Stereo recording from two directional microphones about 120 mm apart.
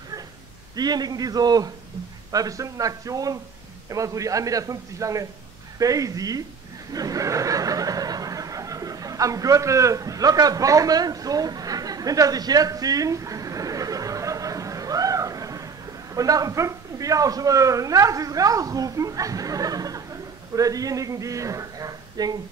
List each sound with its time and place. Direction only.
0.7 s a man's voice: 35° right (ahead or behind)
6.9 s snicker: 30° right (ahead or behind)
16.2 s a man's voice: 30° right (ahead or behind)